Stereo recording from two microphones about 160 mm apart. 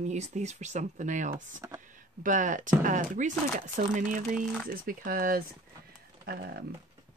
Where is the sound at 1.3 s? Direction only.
20° right (ahead or behind).